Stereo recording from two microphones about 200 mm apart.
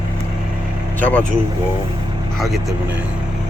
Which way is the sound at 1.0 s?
10° left (ahead or behind).